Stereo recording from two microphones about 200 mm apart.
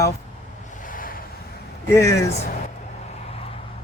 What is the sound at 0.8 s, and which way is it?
Waves, 45° left (ahead or behind).